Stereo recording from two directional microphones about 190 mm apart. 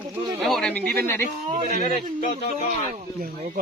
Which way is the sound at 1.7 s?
40° left (ahead or behind).